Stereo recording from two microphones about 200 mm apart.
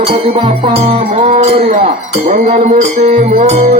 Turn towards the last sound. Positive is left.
turn(degrees=-35)  # may be behind; listen again after turning